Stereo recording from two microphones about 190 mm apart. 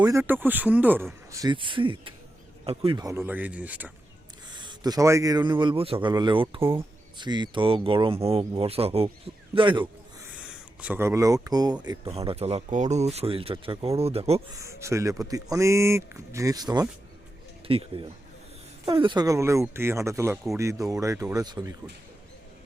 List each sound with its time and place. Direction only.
0.0 s speech: 15° right (ahead or behind)
4.4 s speech: 25° right (ahead or behind)
6.6 s speech: 15° right (ahead or behind)
7.2 s speech: 25° right (ahead or behind)
10.3 s a sound: 5° right (ahead or behind)
11.4 s speech: 20° right (ahead or behind)
14.5 s speech: 15° right (ahead or behind)